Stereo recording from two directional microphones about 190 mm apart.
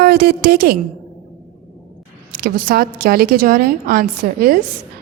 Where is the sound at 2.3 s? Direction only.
55° right (ahead or behind).